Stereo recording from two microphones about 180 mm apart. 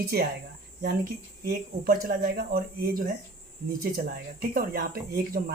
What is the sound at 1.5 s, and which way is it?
Speech, 55° right (ahead or behind).